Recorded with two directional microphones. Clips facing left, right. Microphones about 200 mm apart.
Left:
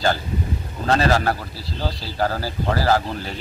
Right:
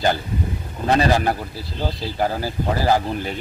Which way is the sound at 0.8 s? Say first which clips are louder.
Right 1 dB; 15° right (ahead or behind).